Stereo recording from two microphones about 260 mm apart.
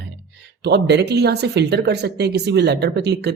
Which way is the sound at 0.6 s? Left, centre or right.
Right.